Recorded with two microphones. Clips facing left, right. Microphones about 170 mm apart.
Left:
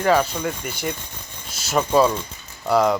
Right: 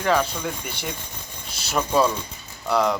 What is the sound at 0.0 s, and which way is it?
Speech, 5° left (ahead or behind).